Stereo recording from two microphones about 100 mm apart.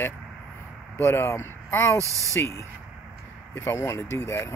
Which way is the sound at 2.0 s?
30° right (ahead or behind).